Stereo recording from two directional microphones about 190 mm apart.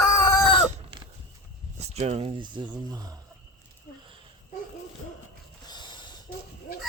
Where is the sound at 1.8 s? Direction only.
35° right (ahead or behind).